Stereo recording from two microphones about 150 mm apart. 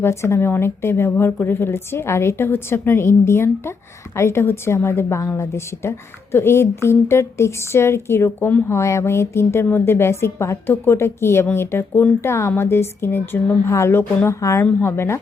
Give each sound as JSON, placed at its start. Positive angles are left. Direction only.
{"t": 0.0, "sound": "speech", "side_deg": 15}